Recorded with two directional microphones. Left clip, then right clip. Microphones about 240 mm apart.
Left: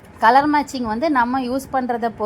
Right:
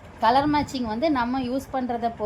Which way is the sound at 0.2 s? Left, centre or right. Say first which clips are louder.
Left 6 dB; left.